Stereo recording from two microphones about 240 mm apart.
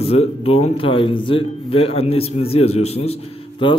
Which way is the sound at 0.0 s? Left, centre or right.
Left.